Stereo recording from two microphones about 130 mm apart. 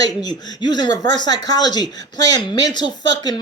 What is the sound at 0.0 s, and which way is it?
Speech, 30° left (ahead or behind).